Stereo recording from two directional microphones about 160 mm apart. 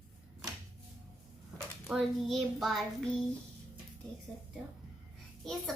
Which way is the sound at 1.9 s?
Centre (ahead or behind).